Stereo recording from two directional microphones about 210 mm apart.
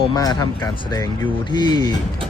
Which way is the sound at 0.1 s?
20° left (ahead or behind).